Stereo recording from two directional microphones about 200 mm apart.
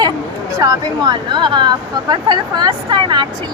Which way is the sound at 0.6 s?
20° right (ahead or behind).